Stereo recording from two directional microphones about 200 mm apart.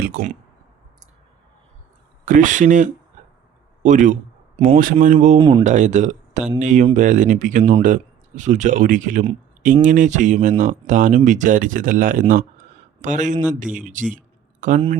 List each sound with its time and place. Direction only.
0.0 s speech: 45° right (ahead or behind)
2.2 s speech: 40° right (ahead or behind)
5.4 s speech: 20° right (ahead or behind)
5.6 s speech: 35° right (ahead or behind)